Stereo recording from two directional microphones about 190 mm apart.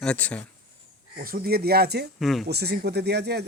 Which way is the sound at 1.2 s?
50° right (ahead or behind).